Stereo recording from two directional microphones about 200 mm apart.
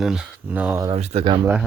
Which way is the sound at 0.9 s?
30° right (ahead or behind).